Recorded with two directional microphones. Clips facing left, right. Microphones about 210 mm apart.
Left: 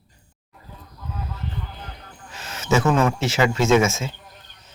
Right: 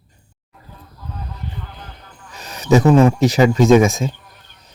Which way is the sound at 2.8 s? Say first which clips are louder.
Right 8 dB; 15° right (ahead or behind).